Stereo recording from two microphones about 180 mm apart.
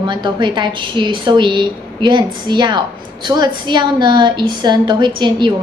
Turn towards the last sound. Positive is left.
turn(degrees=-25)  # may be behind; listen again after turning